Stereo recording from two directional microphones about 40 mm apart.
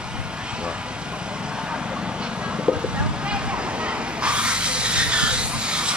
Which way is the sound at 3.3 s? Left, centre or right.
Right.